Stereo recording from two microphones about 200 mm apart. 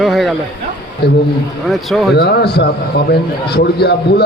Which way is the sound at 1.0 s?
55° left (ahead or behind).